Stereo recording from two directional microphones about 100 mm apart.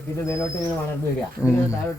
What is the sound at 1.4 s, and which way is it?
Speech, 30° left (ahead or behind).